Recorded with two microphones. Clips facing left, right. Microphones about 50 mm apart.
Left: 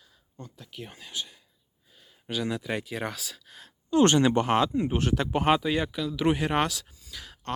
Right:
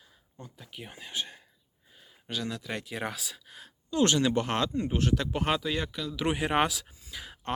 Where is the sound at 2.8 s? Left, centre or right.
Centre.